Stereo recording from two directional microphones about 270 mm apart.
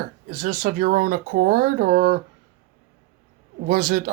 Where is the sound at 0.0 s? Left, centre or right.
Right.